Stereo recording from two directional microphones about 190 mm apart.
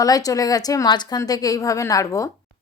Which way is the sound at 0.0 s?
20° left (ahead or behind).